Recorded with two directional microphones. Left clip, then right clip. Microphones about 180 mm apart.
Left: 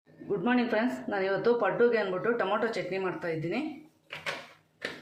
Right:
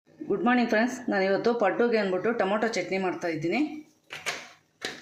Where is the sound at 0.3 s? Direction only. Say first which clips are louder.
Right 4 dB; 45° right (ahead or behind).